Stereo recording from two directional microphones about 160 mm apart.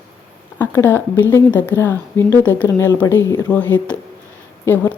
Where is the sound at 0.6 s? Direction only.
10° left (ahead or behind).